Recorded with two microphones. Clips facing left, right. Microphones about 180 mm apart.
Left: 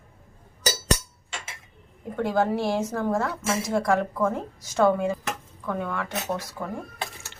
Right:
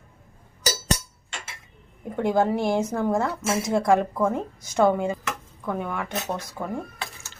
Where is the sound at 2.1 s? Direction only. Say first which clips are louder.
Right 2 dB; 20° right (ahead or behind).